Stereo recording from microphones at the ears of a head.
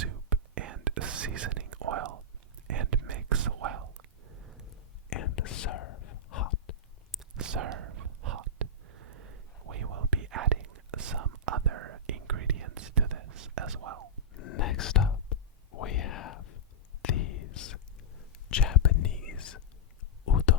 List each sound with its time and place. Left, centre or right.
0.0 s whispering: right
4.7 s whispering: left
7.3 s whispering: right
14.3 s whispering: left
20.2 s a sound: left